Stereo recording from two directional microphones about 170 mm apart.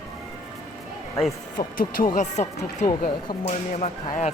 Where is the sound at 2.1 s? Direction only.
40° left (ahead or behind).